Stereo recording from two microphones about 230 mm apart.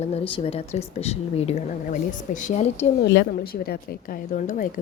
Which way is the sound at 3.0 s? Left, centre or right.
Left.